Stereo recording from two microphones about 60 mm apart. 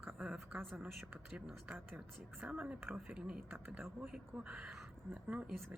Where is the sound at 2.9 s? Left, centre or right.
Centre.